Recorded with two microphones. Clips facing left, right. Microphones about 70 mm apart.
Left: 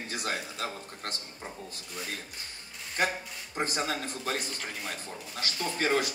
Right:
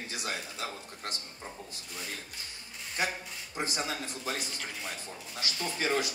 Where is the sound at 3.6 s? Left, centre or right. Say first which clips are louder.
Left 3 dB; left.